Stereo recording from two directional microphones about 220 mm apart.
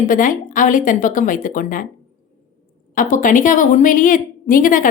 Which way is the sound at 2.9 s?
35° left (ahead or behind).